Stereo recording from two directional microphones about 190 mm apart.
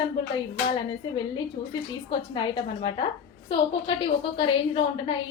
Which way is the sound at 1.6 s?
25° left (ahead or behind).